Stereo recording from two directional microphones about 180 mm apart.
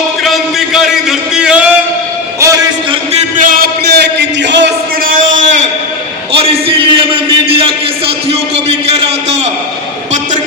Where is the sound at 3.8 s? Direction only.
70° right (ahead or behind).